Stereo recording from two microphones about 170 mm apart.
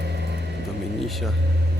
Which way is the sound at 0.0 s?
80° right.